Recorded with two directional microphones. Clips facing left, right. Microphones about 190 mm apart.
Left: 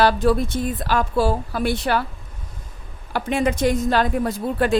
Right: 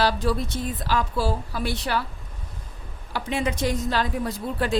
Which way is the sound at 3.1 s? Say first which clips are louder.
Left 5 dB; 55° left (ahead or behind).